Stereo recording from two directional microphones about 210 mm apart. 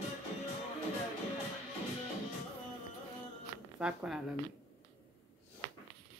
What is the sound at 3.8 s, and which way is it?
Speech, 5° right (ahead or behind).